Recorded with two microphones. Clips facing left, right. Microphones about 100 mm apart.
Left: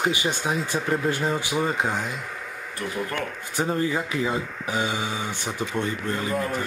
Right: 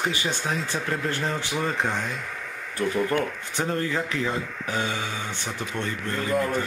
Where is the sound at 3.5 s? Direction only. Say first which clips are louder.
Left 3 dB; 10° left (ahead or behind).